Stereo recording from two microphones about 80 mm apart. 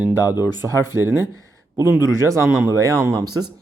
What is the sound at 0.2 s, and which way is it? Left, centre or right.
Speech, left.